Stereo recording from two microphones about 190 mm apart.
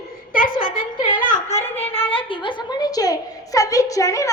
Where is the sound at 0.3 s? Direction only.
45° left (ahead or behind).